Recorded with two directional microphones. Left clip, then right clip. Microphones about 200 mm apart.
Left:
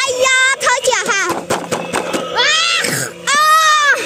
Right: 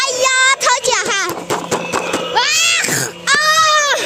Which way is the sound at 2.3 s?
40° right (ahead or behind).